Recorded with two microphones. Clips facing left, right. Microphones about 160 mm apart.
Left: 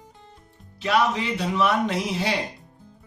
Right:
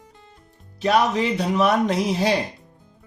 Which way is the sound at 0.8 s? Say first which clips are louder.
Right 3 dB; 40° right (ahead or behind).